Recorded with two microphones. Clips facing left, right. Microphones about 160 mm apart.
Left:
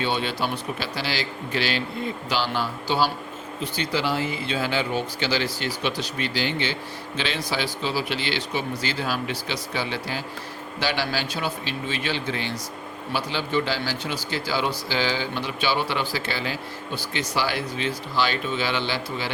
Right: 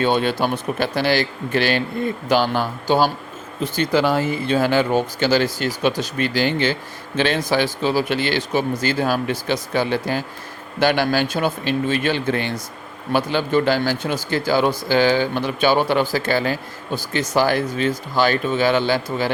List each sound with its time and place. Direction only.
0.0 s speech: 50° right (ahead or behind)